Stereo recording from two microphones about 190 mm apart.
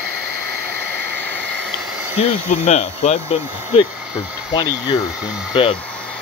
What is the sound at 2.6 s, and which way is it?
Speech, 35° left (ahead or behind).